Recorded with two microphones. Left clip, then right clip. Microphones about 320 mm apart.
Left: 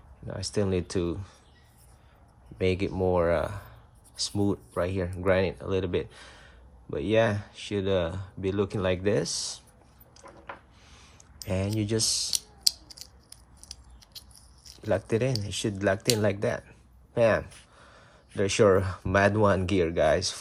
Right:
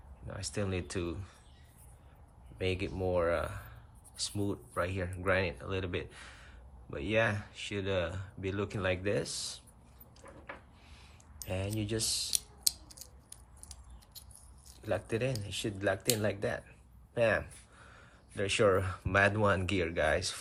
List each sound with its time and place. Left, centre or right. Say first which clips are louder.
0.3 s speech: left 9 dB; centre
2.6 s speech: left 8 dB; centre
10.2 s a sound: left 5 dB; left
10.8 s clicking: left 4 dB; left
17.2 s speech: left 6 dB; centre